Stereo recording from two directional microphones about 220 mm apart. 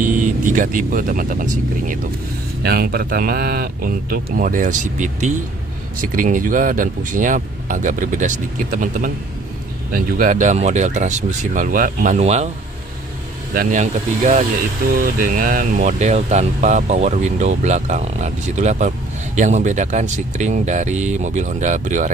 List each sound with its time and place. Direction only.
0.0 s speech: 35° right (ahead or behind)
13.6 s speech: 35° right (ahead or behind)